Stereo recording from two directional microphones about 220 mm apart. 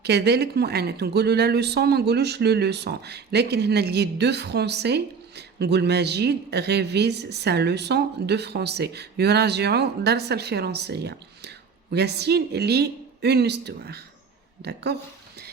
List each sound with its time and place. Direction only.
0.0 s speech: 50° right (ahead or behind)